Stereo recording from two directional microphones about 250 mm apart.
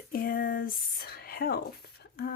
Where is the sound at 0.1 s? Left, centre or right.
Left.